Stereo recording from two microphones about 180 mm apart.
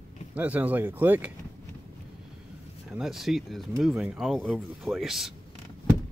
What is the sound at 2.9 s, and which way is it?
Speech, centre (ahead or behind).